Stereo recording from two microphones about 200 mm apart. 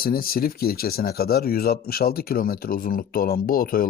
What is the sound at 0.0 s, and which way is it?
Speech, 50° left (ahead or behind).